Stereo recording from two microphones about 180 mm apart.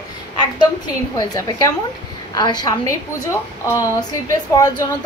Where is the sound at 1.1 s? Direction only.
20° left (ahead or behind).